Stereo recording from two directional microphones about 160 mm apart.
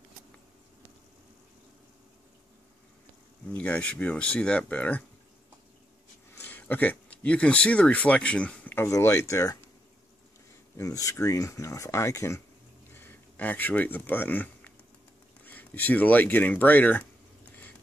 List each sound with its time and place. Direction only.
3.5 s speech: 10° left (ahead or behind)
6.4 s speech: 10° left (ahead or behind)
10.8 s speech: 20° left (ahead or behind)